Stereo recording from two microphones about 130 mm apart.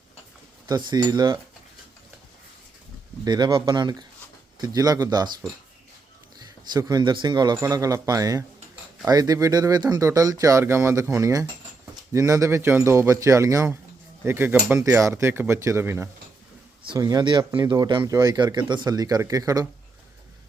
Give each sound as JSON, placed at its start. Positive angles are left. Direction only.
{"t": 0.7, "sound": "speech", "side_deg": -35}
{"t": 3.2, "sound": "speech", "side_deg": -35}
{"t": 6.7, "sound": "speech", "side_deg": -30}
{"t": 16.8, "sound": "speech", "side_deg": -30}